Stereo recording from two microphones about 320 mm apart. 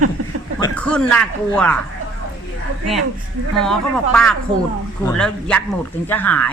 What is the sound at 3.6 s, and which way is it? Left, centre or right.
Speech, centre.